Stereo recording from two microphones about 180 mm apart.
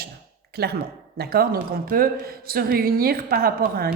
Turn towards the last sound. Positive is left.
turn(degrees=-55)  # may be behind; listen again after turning